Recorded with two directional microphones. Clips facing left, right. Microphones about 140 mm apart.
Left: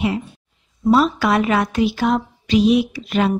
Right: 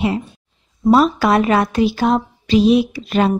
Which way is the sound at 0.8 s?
45° right (ahead or behind).